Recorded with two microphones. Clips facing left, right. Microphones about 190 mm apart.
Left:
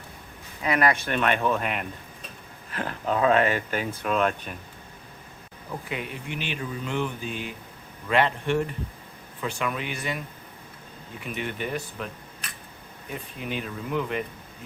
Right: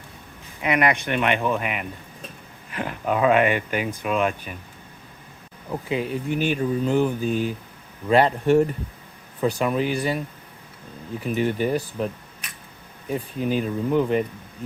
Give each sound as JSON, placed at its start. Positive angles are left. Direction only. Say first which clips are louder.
{"t": 0.6, "sound": "speech", "louder": "right 2 dB", "side_deg": -20}
{"t": 5.9, "sound": "speech", "louder": "right 10 dB", "side_deg": -35}
{"t": 13.4, "sound": "speech", "louder": "right 9 dB", "side_deg": -35}